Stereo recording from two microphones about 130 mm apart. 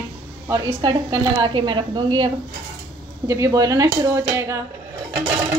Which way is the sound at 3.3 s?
25° right (ahead or behind).